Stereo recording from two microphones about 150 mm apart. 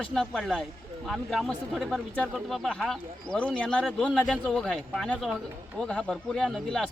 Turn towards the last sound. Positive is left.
turn(degrees=5)  # may be behind; listen again after turning